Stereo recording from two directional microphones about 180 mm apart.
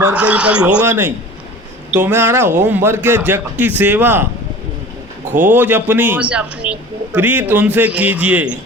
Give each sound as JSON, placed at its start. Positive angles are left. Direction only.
{"t": 0.0, "sound": "a man's voice", "side_deg": -5}
{"t": 5.4, "sound": "a man's voice", "side_deg": -10}